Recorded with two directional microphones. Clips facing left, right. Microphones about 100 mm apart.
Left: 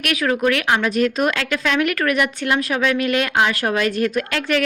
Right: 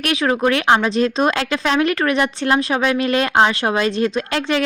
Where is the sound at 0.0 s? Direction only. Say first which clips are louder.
Right 2 dB; 25° right (ahead or behind).